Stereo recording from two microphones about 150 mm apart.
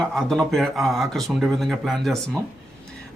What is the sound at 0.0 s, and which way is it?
A man's voice, 5° left (ahead or behind).